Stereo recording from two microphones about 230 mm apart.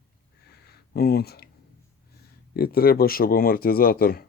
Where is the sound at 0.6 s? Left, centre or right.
Left.